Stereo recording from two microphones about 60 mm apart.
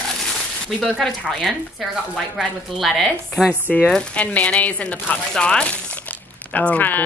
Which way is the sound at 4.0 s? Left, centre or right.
Left.